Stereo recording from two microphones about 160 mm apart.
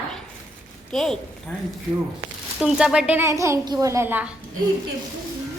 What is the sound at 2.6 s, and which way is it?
A woman's voice, 5° right (ahead or behind).